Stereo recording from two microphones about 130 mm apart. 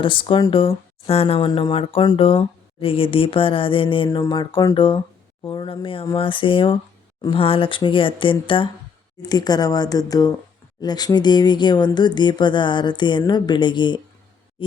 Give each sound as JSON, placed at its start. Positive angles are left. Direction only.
{"t": 0.0, "sound": "speech", "side_deg": 40}
{"t": 1.5, "sound": "speech", "side_deg": 35}
{"t": 1.7, "sound": "speech", "side_deg": 45}